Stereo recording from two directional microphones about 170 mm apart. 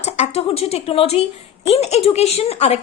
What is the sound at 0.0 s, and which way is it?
A woman's voice, 40° left (ahead or behind).